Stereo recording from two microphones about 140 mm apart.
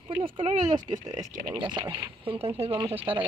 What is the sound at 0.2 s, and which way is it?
Speech, 40° right (ahead or behind).